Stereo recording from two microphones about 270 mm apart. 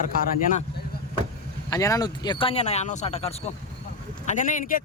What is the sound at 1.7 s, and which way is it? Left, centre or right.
Speech, centre.